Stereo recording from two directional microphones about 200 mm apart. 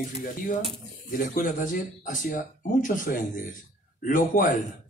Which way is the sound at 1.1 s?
45° left (ahead or behind).